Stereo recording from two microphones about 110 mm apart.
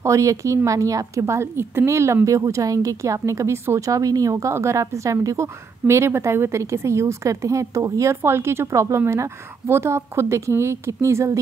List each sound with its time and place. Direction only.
0.0 s a woman's voice: 30° right (ahead or behind)